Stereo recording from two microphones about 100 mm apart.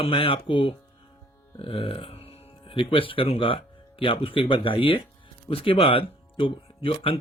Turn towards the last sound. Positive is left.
turn(degrees=70)  # may be behind; listen again after turning